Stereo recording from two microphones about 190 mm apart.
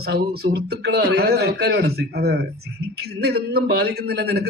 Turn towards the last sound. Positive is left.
turn(degrees=-60)  # may be behind; listen again after turning